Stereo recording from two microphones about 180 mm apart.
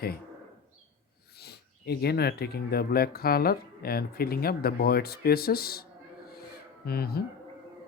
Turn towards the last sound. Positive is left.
turn(degrees=60)  # may be behind; listen again after turning